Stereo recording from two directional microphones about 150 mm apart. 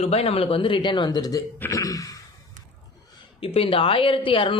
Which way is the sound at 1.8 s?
25° left (ahead or behind).